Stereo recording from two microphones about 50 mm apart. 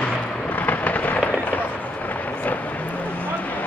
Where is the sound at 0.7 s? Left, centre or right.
Left.